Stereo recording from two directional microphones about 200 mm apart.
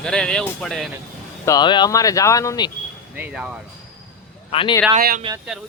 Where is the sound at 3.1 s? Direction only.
5° right (ahead or behind).